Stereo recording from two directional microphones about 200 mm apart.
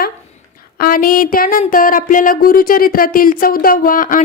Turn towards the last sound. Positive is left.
turn(degrees=45)  # may be behind; listen again after turning